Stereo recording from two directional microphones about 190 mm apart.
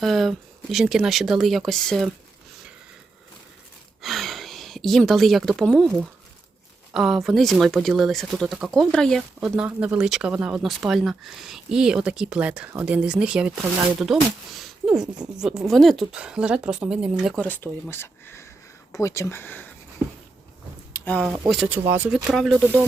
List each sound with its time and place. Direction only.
0.0 s speech: centre (ahead or behind)
4.0 s a sound: centre (ahead or behind)
6.9 s speech: centre (ahead or behind)
17.4 s speech: 10° left (ahead or behind)
20.9 s a sound: 10° left (ahead or behind)
21.2 s speech: centre (ahead or behind)